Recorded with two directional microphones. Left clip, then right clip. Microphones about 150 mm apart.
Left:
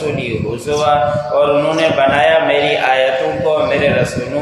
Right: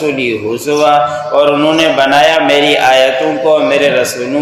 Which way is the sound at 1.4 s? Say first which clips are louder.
Right 4 dB; 35° right (ahead or behind).